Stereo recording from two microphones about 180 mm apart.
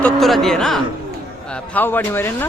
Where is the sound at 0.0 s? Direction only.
Centre (ahead or behind).